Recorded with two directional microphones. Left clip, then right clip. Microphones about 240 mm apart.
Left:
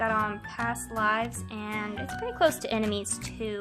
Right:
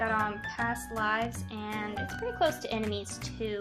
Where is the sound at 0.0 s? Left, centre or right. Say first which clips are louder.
Left 2 dB; left.